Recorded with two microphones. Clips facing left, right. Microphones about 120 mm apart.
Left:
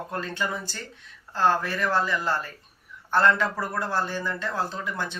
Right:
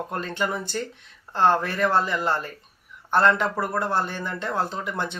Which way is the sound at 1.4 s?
20° right (ahead or behind).